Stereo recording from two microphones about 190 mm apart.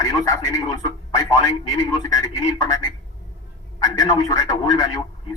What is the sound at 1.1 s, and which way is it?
A man's voice, 20° left (ahead or behind).